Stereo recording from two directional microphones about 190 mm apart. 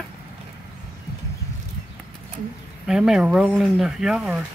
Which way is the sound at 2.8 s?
5° right (ahead or behind).